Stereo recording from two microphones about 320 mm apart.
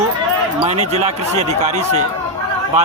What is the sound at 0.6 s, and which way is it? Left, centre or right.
A man's voice, centre.